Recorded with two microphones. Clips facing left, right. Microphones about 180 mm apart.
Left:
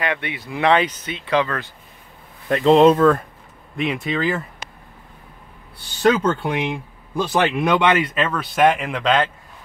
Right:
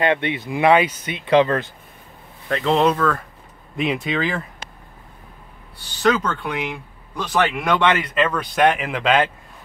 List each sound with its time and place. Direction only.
0.0 s speech: 25° right (ahead or behind); by 1.1 s 10° right (ahead or behind)
1.2 s speech: 25° right (ahead or behind)
2.4 s speech: 20° left (ahead or behind)
3.8 s a man's voice: centre (ahead or behind)
6.0 s speech: 25° left (ahead or behind)
8.0 s a man's voice: 5° left (ahead or behind)